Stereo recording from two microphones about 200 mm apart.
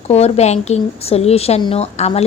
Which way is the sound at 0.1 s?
30° left (ahead or behind).